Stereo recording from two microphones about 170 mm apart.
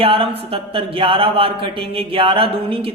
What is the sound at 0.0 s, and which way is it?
Speech, 35° right (ahead or behind).